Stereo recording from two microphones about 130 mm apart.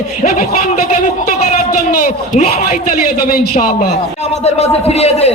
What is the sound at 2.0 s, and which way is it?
A man's voice, 70° left (ahead or behind).